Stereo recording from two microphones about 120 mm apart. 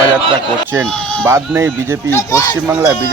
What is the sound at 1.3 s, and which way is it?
Speech, 25° right (ahead or behind).